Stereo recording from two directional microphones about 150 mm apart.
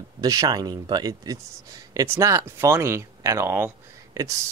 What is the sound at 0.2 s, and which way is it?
Speech, 25° right (ahead or behind).